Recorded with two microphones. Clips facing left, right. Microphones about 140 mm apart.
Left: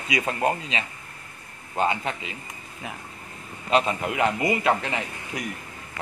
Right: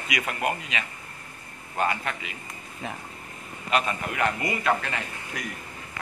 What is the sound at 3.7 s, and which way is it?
Speech, 25° left (ahead or behind).